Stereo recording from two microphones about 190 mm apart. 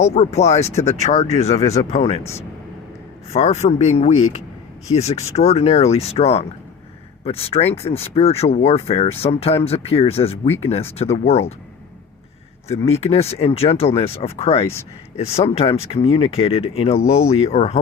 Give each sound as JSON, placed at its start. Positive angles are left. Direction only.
{"t": 0.0, "sound": "speech", "side_deg": 35}
{"t": 3.3, "sound": "speech", "side_deg": 35}
{"t": 12.6, "sound": "speech", "side_deg": 35}